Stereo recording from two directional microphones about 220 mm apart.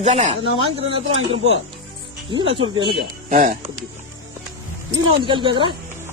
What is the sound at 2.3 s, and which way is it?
Speech, 25° right (ahead or behind).